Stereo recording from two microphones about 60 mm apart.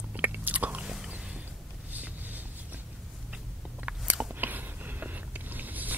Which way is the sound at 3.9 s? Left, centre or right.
Right.